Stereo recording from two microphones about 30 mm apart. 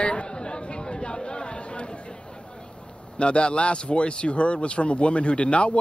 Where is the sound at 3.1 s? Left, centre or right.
Left.